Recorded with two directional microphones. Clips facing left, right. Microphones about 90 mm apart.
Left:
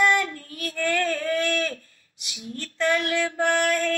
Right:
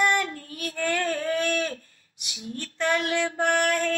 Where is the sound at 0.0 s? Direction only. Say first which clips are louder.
Left 2 dB; 25° right (ahead or behind).